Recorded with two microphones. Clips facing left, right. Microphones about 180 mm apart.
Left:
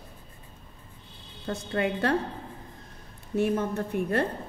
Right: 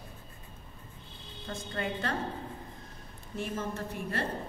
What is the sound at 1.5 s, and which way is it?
Speech, 70° left (ahead or behind).